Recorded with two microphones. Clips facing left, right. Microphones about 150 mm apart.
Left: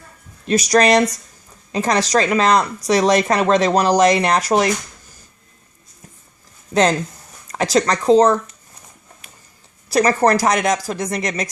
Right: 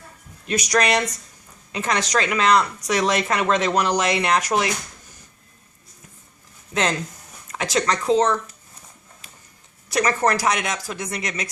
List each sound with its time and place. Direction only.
0.4 s speech: 35° left (ahead or behind)
7.5 s speech: 40° left (ahead or behind)
9.9 s speech: 35° left (ahead or behind)